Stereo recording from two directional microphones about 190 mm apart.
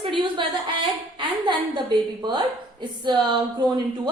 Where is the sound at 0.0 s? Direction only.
25° right (ahead or behind).